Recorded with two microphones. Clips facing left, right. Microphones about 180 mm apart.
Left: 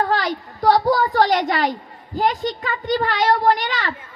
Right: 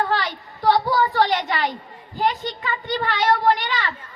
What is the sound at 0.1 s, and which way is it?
A woman's voice, 45° left (ahead or behind).